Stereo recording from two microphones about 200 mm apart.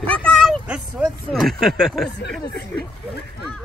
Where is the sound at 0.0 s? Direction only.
5° left (ahead or behind).